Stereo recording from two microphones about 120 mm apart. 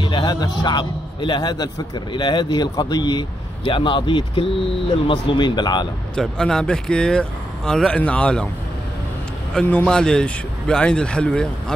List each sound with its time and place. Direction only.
0.0 s a man's voice: 35° left (ahead or behind)
6.1 s speech: 5° left (ahead or behind)
9.5 s speech: 10° left (ahead or behind)